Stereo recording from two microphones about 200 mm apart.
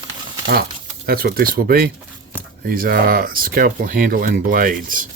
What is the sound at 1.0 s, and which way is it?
Speech, 50° right (ahead or behind).